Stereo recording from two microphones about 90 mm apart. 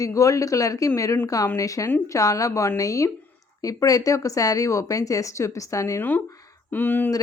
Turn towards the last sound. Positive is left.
turn(degrees=20)  # may be behind; listen again after turning